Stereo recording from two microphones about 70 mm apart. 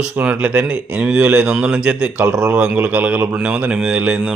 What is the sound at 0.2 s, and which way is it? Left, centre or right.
Speech, right.